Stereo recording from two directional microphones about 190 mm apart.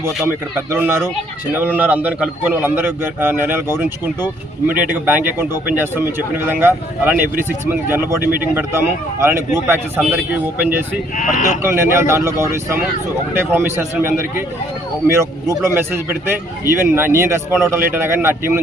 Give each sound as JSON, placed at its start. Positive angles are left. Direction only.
{"t": 0.7, "sound": "speech", "side_deg": -10}
{"t": 11.2, "sound": "speech", "side_deg": 40}
{"t": 11.6, "sound": "speech", "side_deg": -15}